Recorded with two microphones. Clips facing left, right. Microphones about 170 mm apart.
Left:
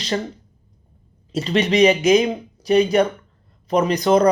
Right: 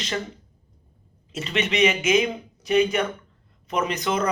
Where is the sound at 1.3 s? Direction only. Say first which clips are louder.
Left 7 dB; 35° left (ahead or behind).